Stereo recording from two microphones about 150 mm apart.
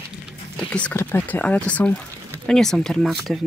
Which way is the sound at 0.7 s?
10° left (ahead or behind).